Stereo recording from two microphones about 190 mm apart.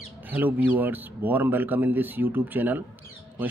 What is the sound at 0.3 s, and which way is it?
Speech, 10° right (ahead or behind).